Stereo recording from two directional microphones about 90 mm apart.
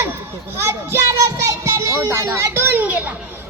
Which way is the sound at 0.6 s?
30° right (ahead or behind).